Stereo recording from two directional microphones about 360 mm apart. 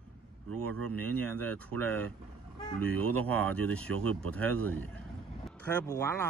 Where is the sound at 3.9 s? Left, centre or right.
Right.